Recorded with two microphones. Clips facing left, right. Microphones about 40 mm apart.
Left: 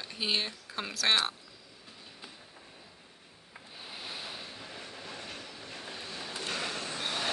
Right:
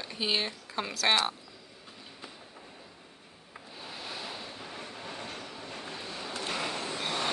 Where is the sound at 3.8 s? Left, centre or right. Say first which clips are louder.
Right 2 dB; centre.